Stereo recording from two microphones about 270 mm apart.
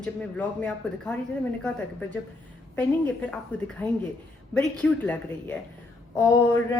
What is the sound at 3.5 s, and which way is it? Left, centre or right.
A woman's voice, centre.